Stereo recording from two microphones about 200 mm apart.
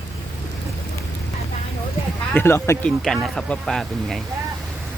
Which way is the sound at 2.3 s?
10° left (ahead or behind).